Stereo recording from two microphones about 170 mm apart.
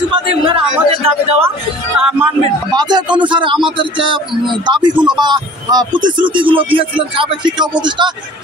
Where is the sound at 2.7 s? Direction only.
25° right (ahead or behind).